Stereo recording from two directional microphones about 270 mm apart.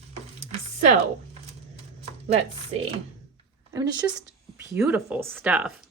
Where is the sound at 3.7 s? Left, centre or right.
Centre.